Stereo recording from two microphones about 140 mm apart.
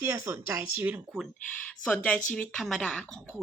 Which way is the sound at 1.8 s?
10° left (ahead or behind).